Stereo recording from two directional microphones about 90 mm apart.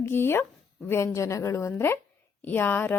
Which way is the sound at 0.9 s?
30° left (ahead or behind).